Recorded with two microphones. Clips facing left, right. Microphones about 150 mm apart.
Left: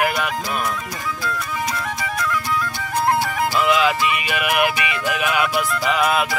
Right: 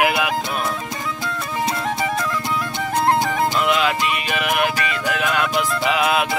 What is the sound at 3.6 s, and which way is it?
Music, centre (ahead or behind).